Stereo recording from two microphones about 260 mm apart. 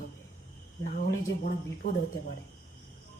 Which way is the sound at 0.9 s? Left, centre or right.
Left.